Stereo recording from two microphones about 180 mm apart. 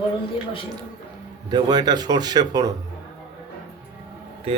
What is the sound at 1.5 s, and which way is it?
Speech, 25° right (ahead or behind).